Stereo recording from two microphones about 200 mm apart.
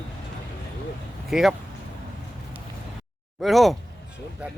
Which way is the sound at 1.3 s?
Centre (ahead or behind).